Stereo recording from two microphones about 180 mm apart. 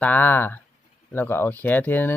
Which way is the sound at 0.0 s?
10° left (ahead or behind).